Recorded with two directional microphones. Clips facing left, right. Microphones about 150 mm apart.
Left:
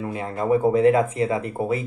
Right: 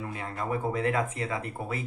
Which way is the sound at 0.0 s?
25° left (ahead or behind).